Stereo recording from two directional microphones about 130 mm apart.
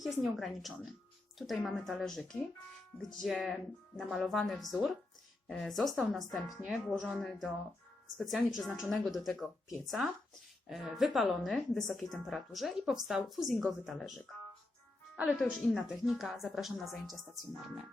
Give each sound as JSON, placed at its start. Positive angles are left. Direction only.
{"t": 0.0, "sound": "a woman's voice", "side_deg": 0}